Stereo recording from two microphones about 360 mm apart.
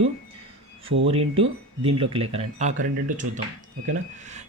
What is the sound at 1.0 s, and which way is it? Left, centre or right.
Speech, centre.